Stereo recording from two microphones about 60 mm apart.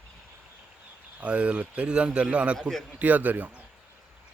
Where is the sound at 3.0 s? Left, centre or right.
Right.